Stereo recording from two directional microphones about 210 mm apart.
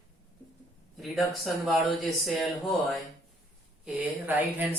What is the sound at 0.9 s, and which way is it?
Speech, centre (ahead or behind).